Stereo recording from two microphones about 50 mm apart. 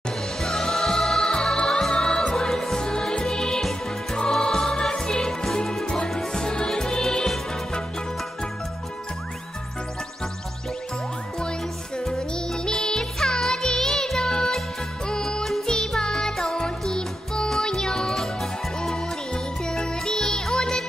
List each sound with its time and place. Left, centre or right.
0.4 s music: centre
12.1 s music: centre
15.4 s music: centre
18.9 s music: centre